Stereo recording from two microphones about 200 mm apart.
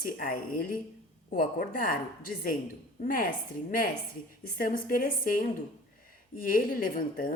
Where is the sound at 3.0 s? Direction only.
45° left (ahead or behind).